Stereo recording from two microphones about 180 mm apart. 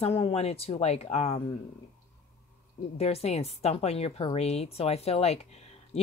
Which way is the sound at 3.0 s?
35° left (ahead or behind).